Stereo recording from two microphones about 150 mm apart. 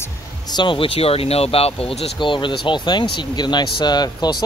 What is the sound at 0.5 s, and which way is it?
Speech, 30° left (ahead or behind).